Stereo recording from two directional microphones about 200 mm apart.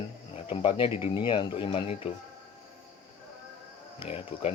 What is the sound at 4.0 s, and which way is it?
Speech, 30° left (ahead or behind).